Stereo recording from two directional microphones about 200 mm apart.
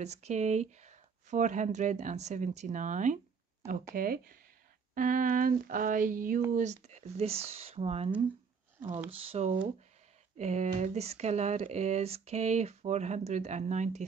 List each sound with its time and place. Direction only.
0.0 s speech: 35° right (ahead or behind)
9.2 s speech: 30° right (ahead or behind)